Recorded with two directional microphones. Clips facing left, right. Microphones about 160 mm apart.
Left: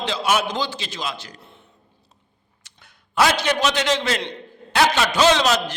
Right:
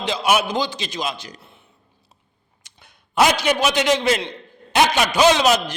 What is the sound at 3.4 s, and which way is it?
A man's voice, 10° right (ahead or behind).